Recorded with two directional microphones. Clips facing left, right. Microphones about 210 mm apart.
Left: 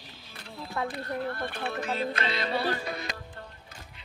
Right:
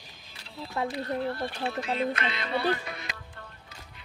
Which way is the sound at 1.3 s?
55° left (ahead or behind).